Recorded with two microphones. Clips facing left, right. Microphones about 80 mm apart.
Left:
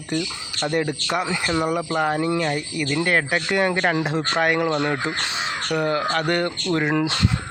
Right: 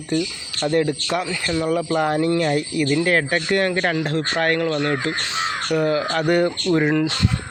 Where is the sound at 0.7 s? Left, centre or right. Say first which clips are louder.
Right 3 dB; centre.